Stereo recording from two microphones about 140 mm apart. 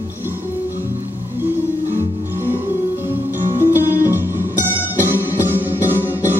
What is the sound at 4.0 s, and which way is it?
Music, 15° right (ahead or behind).